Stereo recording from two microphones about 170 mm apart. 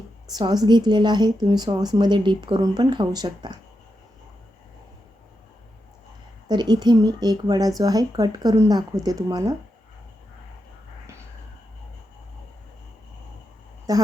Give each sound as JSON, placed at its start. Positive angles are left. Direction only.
{"t": 0.3, "sound": "a woman's voice", "side_deg": -25}
{"t": 6.5, "sound": "a woman's voice", "side_deg": -25}
{"t": 13.9, "sound": "a woman's voice", "side_deg": -20}